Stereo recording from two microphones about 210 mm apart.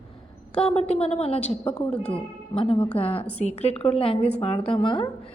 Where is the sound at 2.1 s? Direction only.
25° left (ahead or behind).